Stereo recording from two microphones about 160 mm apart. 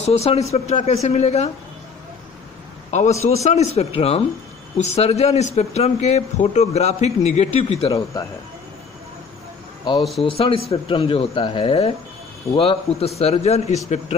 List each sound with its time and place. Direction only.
0.0 s speech: 40° left (ahead or behind)
2.9 s speech: 50° left (ahead or behind)
7.9 s speech: 20° left (ahead or behind)
10.2 s speech: 35° left (ahead or behind)